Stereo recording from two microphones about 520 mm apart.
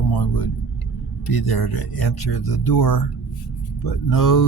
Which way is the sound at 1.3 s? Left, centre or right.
Left.